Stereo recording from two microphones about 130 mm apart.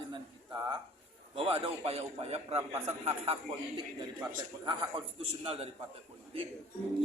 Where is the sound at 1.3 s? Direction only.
45° right (ahead or behind).